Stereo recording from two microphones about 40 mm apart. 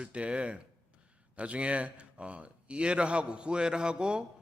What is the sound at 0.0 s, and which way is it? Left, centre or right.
A man's voice, right.